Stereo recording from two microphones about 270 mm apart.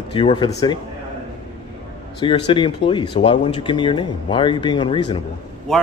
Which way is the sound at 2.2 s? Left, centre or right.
Centre.